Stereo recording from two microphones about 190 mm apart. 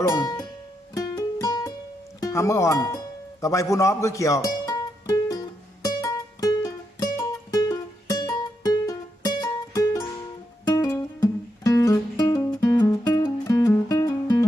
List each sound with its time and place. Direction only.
0.1 s speech: 20° left (ahead or behind)
0.9 s music: 20° left (ahead or behind)
2.2 s speech: 15° left (ahead or behind)
3.4 s music: 15° left (ahead or behind)